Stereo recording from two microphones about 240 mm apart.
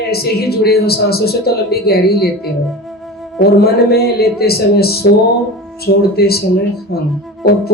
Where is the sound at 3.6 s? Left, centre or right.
Left.